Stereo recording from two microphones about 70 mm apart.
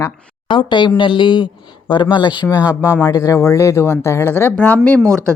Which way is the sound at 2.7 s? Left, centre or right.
Right.